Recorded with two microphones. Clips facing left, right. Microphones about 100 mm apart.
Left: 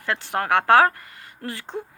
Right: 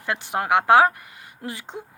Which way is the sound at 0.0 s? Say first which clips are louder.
Even; 15° right (ahead or behind).